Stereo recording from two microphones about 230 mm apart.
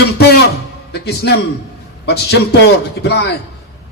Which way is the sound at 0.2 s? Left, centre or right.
Left.